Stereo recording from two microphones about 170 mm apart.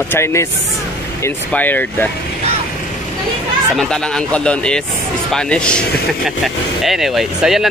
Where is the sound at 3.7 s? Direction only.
5° left (ahead or behind).